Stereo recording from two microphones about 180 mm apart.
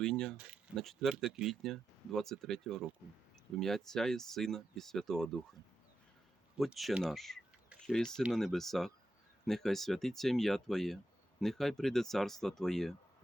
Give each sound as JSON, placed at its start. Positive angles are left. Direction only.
{"t": 0.0, "sound": "speech", "side_deg": 5}
{"t": 6.6, "sound": "speech", "side_deg": 0}